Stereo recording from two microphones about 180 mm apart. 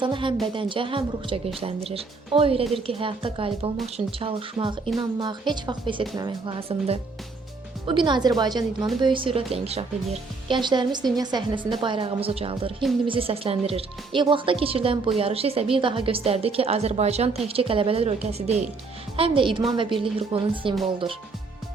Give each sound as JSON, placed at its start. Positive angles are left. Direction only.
{"t": 0.0, "sound": "speech", "side_deg": -25}